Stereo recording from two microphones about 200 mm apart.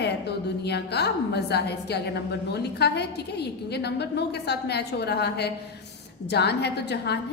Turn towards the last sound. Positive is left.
turn(degrees=55)  # may be behind; listen again after turning